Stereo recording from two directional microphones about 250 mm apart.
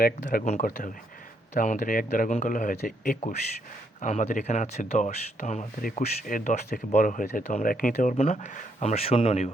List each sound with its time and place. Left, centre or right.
0.0 s speech: left